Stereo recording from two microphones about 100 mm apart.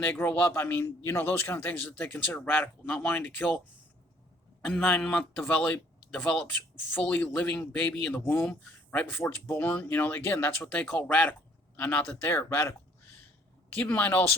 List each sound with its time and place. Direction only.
0.0 s speech: 20° left (ahead or behind)
4.6 s speech: 15° left (ahead or behind)
13.8 s speech: 15° left (ahead or behind)